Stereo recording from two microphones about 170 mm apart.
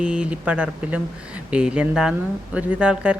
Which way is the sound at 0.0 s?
5° right (ahead or behind).